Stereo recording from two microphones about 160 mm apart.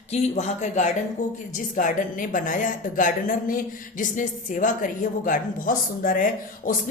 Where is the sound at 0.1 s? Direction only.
45° left (ahead or behind).